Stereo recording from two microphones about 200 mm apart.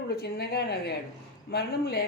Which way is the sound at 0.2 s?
50° left (ahead or behind).